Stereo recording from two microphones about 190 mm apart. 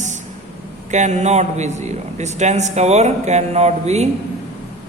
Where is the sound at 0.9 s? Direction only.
40° right (ahead or behind).